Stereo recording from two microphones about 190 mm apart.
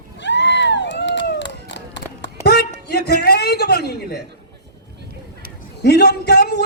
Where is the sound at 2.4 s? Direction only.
60° left (ahead or behind).